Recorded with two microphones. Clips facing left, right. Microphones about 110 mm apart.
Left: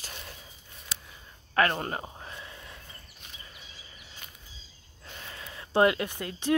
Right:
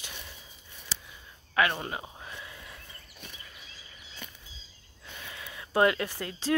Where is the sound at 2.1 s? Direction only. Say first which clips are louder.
Left 1 dB; 30° left (ahead or behind).